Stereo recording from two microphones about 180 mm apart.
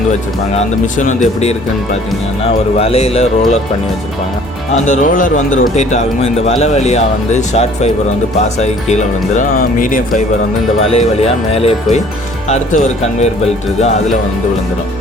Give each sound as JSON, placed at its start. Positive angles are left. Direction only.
{"t": 0.5, "sound": "speech", "side_deg": 45}
{"t": 4.9, "sound": "speech", "side_deg": 45}
{"t": 10.8, "sound": "speech", "side_deg": 35}